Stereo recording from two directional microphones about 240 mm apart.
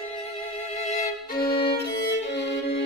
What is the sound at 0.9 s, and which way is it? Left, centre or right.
Violin, left.